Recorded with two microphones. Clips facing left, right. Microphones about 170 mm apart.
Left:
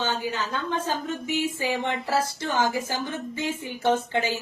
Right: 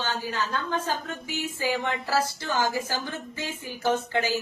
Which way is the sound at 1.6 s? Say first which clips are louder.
Left 1 dB; 25° left (ahead or behind).